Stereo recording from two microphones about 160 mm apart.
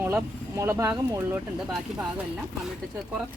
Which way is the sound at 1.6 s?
5° right (ahead or behind).